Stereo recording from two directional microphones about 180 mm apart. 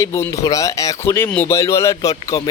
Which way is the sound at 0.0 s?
15° left (ahead or behind).